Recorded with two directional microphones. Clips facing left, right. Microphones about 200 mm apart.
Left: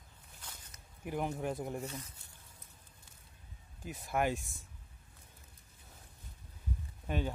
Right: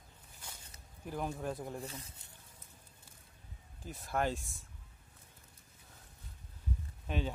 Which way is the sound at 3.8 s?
15° left (ahead or behind).